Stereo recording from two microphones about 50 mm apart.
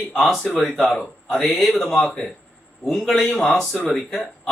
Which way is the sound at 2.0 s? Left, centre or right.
Left.